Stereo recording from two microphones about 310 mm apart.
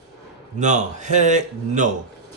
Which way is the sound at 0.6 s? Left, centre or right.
Right.